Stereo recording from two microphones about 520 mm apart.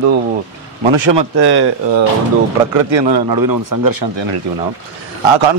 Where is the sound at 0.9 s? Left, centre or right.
Right.